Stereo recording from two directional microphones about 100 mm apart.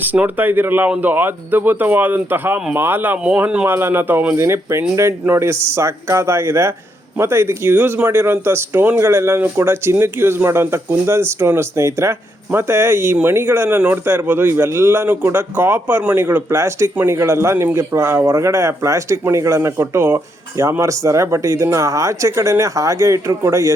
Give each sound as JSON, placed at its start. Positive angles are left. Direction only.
{"t": 0.1, "sound": "a man's voice", "side_deg": -20}